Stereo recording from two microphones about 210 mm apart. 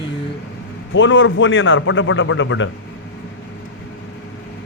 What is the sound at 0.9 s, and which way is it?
A man's voice, 65° left (ahead or behind).